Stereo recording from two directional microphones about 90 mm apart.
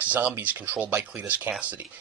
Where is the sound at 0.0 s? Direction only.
20° right (ahead or behind).